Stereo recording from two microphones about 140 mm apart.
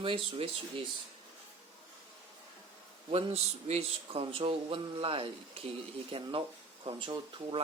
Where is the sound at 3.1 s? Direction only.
50° right (ahead or behind).